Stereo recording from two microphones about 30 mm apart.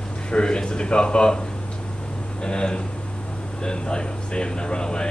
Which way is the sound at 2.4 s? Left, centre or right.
Left.